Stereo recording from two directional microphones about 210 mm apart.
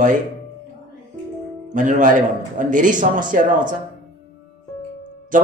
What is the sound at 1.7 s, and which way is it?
A man's voice, 40° right (ahead or behind).